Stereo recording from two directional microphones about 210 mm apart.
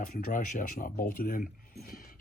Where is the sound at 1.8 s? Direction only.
45° left (ahead or behind).